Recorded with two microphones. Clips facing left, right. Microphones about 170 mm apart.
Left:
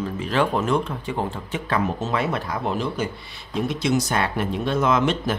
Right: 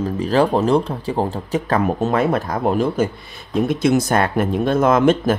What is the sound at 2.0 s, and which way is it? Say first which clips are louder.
Speech: right 7 dB; 55° right (ahead or behind).